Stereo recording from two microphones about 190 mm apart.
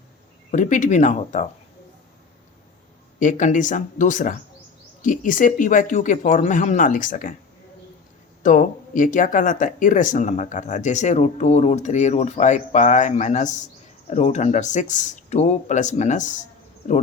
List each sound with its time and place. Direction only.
0.5 s speech: 40° left (ahead or behind)
3.2 s speech: 40° left (ahead or behind)
8.4 s speech: 45° left (ahead or behind)